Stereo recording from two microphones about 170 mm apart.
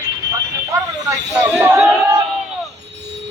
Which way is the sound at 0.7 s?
20° right (ahead or behind).